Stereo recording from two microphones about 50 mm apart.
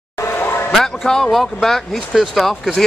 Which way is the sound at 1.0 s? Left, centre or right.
Centre.